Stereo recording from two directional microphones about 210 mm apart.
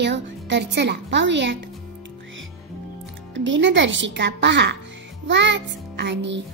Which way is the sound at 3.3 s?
60° right (ahead or behind).